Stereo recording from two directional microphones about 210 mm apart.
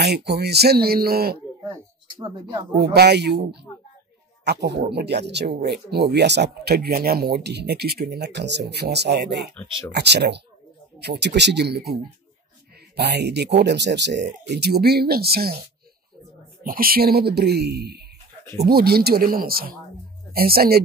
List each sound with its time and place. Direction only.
0.0 s speech: 50° right (ahead or behind)
1.6 s a sound: 15° right (ahead or behind)
2.7 s speech: 50° right (ahead or behind)
4.5 s speech: 50° right (ahead or behind)
16.6 s speech: 45° right (ahead or behind)